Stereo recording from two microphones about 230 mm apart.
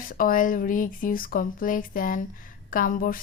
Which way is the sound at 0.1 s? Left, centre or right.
Left.